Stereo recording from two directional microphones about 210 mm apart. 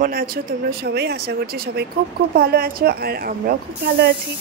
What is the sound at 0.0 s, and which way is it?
Speech, 45° right (ahead or behind).